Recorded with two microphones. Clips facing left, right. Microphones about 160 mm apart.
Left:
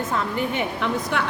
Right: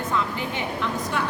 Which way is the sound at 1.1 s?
75° left (ahead or behind).